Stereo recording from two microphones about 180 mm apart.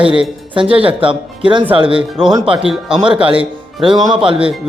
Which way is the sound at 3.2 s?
30° right (ahead or behind).